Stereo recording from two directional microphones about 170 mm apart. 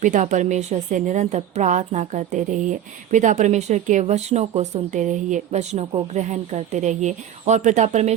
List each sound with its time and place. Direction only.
0.0 s a woman's voice: 50° right (ahead or behind)